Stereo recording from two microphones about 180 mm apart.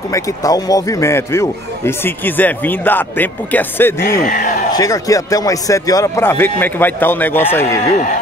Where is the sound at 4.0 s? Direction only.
55° left (ahead or behind).